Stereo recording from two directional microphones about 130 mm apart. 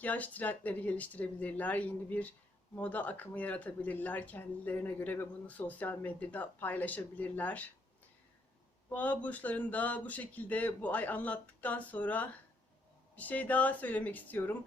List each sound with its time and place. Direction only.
0.0 s speech: 10° left (ahead or behind)
9.0 s speech: 10° left (ahead or behind)